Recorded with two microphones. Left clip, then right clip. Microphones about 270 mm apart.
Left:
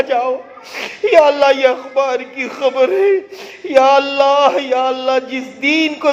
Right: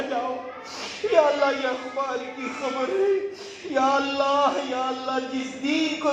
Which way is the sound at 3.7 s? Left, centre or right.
Left.